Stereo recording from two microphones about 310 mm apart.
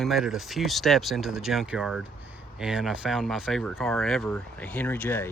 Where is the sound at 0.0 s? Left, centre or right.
Centre.